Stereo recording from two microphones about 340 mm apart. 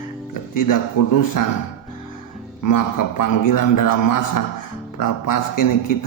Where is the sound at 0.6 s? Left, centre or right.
Left.